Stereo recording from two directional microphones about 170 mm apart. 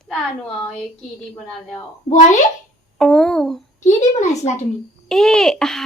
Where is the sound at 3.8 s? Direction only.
45° left (ahead or behind).